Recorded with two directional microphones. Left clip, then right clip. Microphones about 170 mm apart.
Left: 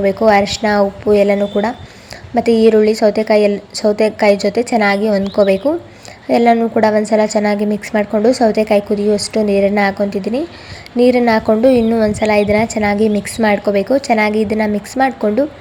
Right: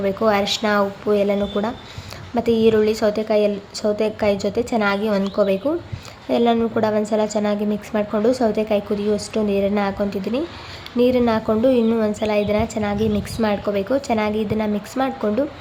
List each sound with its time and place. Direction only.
0.3 s a woman's voice: 20° left (ahead or behind)